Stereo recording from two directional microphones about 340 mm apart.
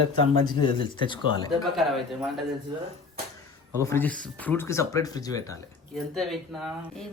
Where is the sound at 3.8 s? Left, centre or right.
Centre.